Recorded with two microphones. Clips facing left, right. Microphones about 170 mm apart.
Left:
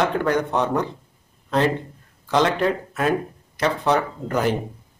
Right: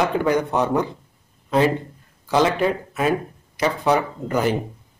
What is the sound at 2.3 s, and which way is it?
Speech, 5° right (ahead or behind).